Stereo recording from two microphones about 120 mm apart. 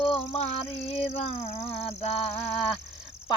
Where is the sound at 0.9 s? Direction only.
55° left (ahead or behind).